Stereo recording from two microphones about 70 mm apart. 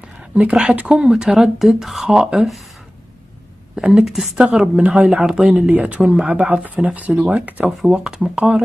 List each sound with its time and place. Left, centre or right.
0.3 s speech: centre
3.7 s a woman's voice: centre
4.7 s speech: centre
5.7 s speech: centre
7.7 s speech: centre